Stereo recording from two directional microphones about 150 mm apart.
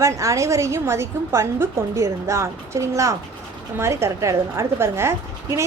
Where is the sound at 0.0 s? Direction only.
20° right (ahead or behind).